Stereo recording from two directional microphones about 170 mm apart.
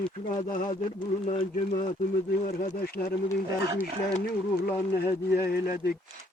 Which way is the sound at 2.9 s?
60° left (ahead or behind).